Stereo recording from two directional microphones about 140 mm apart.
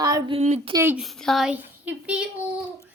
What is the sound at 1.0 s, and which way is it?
A woman's voice, centre (ahead or behind).